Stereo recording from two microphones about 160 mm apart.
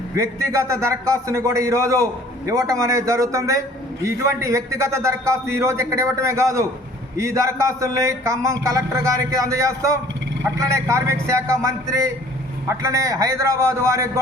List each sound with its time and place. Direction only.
0.2 s a man's voice: 20° right (ahead or behind)